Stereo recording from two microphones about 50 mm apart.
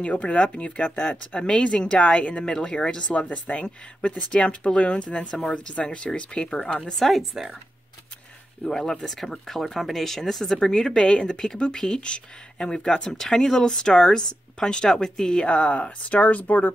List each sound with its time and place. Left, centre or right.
0.0 s speech: left
3.3 s speech: left
6.9 s speech: centre
7.2 s speech: centre
8.6 s speech: centre; by 16.7 s left